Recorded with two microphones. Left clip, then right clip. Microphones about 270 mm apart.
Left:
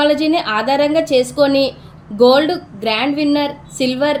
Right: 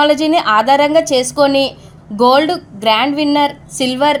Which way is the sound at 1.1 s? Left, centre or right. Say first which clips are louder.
Even; right.